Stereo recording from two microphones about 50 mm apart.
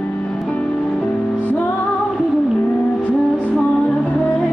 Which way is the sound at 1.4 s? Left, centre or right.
Left.